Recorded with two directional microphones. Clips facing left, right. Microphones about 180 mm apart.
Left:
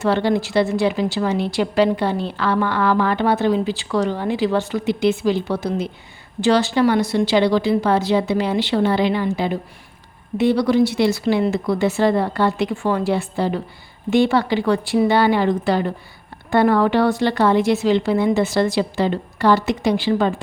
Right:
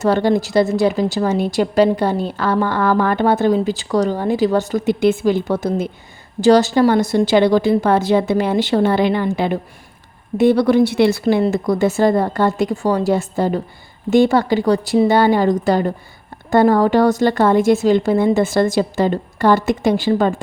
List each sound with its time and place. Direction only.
0.0 s speech: 45° right (ahead or behind)